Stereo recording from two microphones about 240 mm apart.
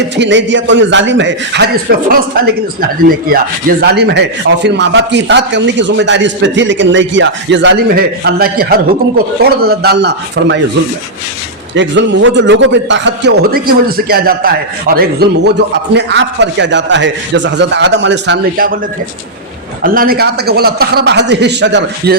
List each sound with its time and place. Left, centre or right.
0.2 s speech: right
11.7 s speech: right
19.8 s a man's voice: right